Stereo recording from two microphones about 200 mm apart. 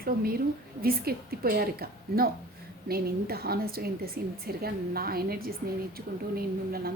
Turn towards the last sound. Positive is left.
turn(degrees=-50)  # may be behind; listen again after turning